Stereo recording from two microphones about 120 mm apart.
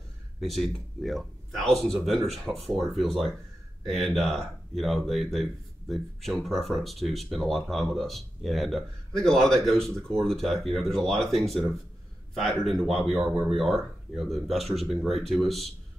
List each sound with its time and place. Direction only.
0.4 s speech: centre (ahead or behind)